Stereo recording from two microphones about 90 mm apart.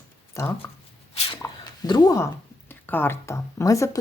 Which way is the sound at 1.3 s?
50° left (ahead or behind).